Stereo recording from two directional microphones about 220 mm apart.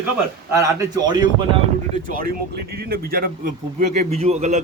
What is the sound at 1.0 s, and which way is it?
Speech, 20° right (ahead or behind).